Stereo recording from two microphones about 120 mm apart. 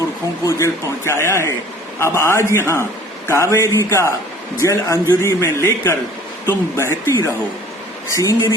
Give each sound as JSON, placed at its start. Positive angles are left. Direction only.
{"t": 0.4, "sound": "speech", "side_deg": 25}